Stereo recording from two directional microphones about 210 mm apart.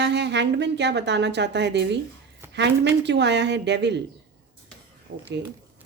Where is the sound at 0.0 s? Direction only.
55° right (ahead or behind).